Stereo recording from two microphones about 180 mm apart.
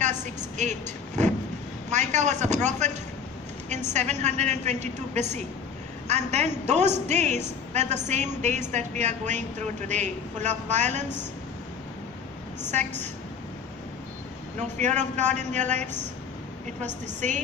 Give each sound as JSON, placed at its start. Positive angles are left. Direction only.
{"t": 0.0, "sound": "vehicle", "side_deg": -40}
{"t": 1.9, "sound": "a woman's voice", "side_deg": -40}
{"t": 3.9, "sound": "a woman's voice", "side_deg": -40}
{"t": 14.6, "sound": "a woman's voice", "side_deg": -40}
{"t": 16.8, "sound": "a woman's voice", "side_deg": -40}